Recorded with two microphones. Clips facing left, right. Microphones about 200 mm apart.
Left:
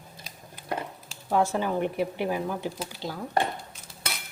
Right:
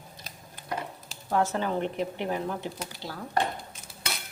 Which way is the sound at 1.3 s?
10° left (ahead or behind).